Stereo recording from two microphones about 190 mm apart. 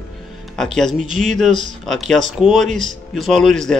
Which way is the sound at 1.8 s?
Centre (ahead or behind).